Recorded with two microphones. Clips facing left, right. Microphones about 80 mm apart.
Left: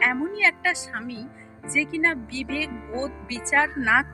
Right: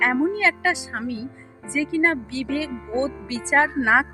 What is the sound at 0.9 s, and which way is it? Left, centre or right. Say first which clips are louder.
Speech: right 5 dB; right.